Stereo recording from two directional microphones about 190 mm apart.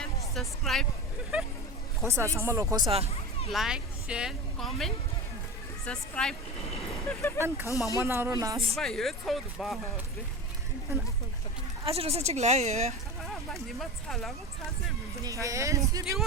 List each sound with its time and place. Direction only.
0.0 s music: centre (ahead or behind)
2.0 s speech: 15° right (ahead or behind)
3.5 s speech: 5° right (ahead or behind)
7.3 s speech: 15° right (ahead or behind)
7.7 s speech: 15° left (ahead or behind)
8.0 s speech: 15° right (ahead or behind)
8.5 s speech: centre (ahead or behind)
11.9 s a woman's voice: 30° right (ahead or behind)
13.2 s speech: centre (ahead or behind)
15.2 s speech: 15° right (ahead or behind)